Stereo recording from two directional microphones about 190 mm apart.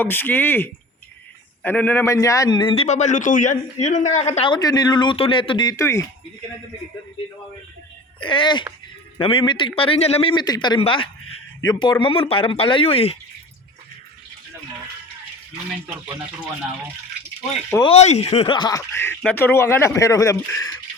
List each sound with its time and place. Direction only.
0.0 s a man's voice: 10° left (ahead or behind)
8.2 s a man's voice: 25° left (ahead or behind)
17.8 s speech: 35° left (ahead or behind)
18.9 s speech: 10° left (ahead or behind)